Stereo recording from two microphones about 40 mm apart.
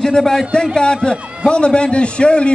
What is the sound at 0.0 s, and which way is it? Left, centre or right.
Speech, centre.